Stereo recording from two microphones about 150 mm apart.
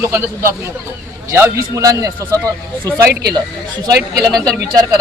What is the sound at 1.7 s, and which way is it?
Speech, 20° right (ahead or behind).